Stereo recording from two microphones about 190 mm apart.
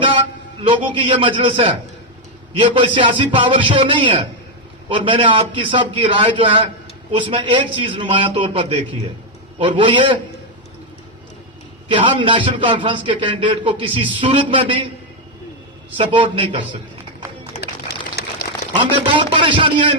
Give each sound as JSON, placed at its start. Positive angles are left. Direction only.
{"t": 0.6, "sound": "a man's voice", "side_deg": -30}
{"t": 11.9, "sound": "a man's voice", "side_deg": -30}
{"t": 16.0, "sound": "a man's voice", "side_deg": -30}
{"t": 17.6, "sound": "a sound", "side_deg": 60}
{"t": 18.8, "sound": "a man's voice", "side_deg": -25}